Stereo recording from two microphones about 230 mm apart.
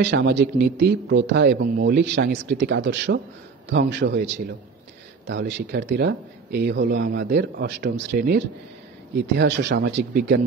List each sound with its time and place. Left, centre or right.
0.0 s speech: right